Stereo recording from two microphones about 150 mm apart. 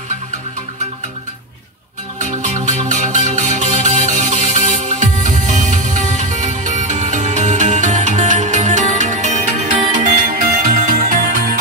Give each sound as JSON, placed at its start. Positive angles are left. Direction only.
{"t": 2.1, "sound": "music", "side_deg": -55}